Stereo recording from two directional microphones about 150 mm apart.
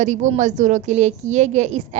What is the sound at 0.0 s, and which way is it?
A woman's voice, 55° right (ahead or behind).